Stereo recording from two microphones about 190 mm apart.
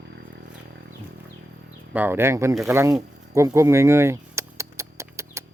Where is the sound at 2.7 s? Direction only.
15° right (ahead or behind).